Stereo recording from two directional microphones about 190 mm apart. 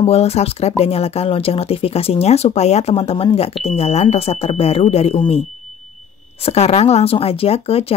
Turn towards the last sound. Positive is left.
turn(degrees=30)  # may be behind; listen again after turning